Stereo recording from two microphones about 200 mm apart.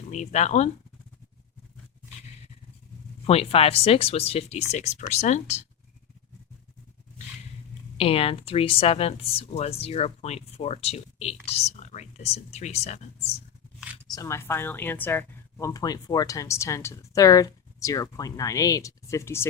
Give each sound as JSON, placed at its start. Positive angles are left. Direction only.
{"t": 0.1, "sound": "speech", "side_deg": 35}
{"t": 3.2, "sound": "speech", "side_deg": 30}
{"t": 7.9, "sound": "speech", "side_deg": 30}
{"t": 14.1, "sound": "speech", "side_deg": 15}